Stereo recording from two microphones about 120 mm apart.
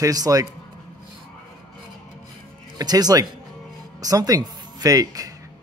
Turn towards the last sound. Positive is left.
turn(degrees=-30)  # may be behind; listen again after turning